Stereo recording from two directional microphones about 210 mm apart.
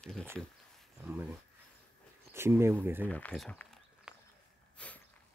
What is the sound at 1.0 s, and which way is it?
Speech, 10° right (ahead or behind).